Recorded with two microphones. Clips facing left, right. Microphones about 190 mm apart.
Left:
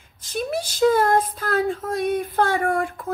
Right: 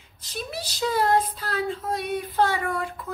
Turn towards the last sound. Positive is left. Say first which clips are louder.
# left 6 dB
turn(degrees=50)  # may be behind; listen again after turning